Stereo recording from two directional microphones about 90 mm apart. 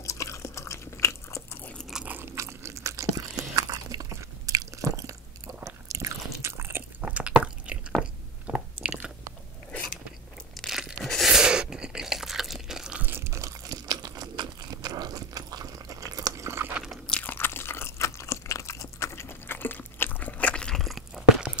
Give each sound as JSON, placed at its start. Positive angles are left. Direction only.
{"t": 0.0, "sound": "biting", "side_deg": 35}
{"t": 1.9, "sound": "biting", "side_deg": -5}
{"t": 2.3, "sound": "a sound", "side_deg": -35}
{"t": 5.6, "sound": "biting", "side_deg": -35}
{"t": 7.0, "sound": "drip", "side_deg": -15}
{"t": 8.0, "sound": "biting", "side_deg": -15}
{"t": 10.7, "sound": "tearing", "side_deg": -5}
{"t": 11.1, "sound": "chewing", "side_deg": 0}
{"t": 13.0, "sound": "crunch", "side_deg": -25}
{"t": 16.4, "sound": "chewing", "side_deg": -30}
{"t": 16.7, "sound": "crunch", "side_deg": -5}
{"t": 17.1, "sound": "crunch", "side_deg": 20}